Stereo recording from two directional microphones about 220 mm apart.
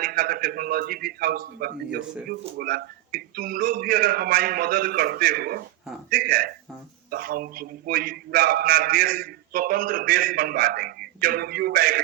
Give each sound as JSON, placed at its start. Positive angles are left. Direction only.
{"t": 0.0, "sound": "a man's voice", "side_deg": -45}